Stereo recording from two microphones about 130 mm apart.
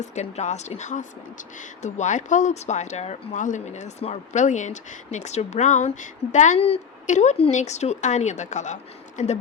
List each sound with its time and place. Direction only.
0.0 s speech: 60° left (ahead or behind)